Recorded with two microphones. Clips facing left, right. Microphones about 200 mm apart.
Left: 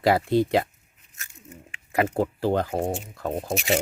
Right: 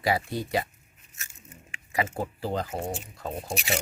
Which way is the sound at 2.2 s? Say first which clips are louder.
Left 7 dB; 65° left (ahead or behind).